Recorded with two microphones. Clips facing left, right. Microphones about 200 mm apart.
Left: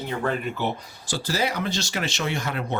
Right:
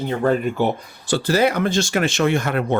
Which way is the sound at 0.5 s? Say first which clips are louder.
Right 7 dB; 55° right (ahead or behind).